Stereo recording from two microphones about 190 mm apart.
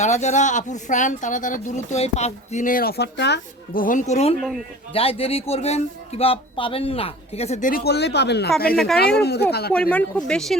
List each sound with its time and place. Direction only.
0.0 s speech: 40° left (ahead or behind); by 3.8 s 65° left (ahead or behind)
3.8 s speech: 40° left (ahead or behind)
7.7 s speech: 60° left (ahead or behind)
8.7 s speech: centre (ahead or behind)
9.0 s speech: 55° left (ahead or behind)
9.9 s speech: 5° left (ahead or behind)